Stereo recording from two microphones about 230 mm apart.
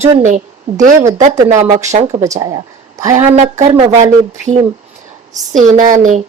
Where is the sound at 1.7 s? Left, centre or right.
Centre.